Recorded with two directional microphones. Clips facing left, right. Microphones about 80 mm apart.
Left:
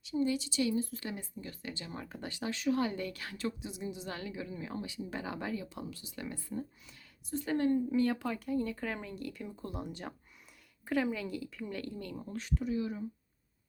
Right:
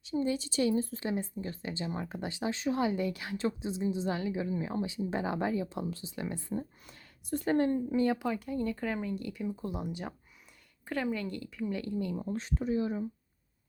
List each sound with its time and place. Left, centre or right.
0.0 s a woman's voice: right; by 3.3 s centre
3.3 s speech: right
4.1 s a woman's voice: centre
6.8 s speech: right
7.9 s speech: centre
12.3 s speech: right